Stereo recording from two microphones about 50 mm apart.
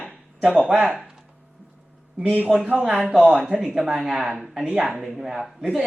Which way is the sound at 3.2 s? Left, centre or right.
Right.